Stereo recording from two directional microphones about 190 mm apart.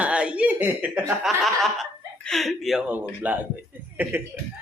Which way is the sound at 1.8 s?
Centre (ahead or behind).